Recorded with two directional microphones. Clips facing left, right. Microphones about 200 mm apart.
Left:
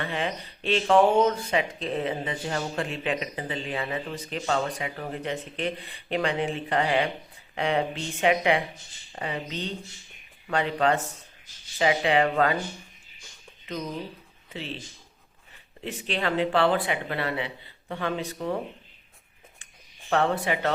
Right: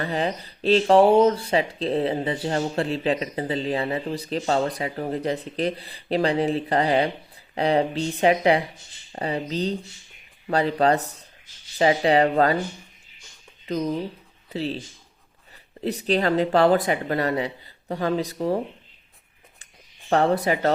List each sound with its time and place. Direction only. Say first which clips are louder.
0.0 s speech: right 4 dB; 35° right (ahead or behind)
14.5 s speech: right 8 dB; 35° right (ahead or behind)
15.8 s speech: right 7 dB; 35° right (ahead or behind)
20.1 s speech: right 4 dB; 40° right (ahead or behind)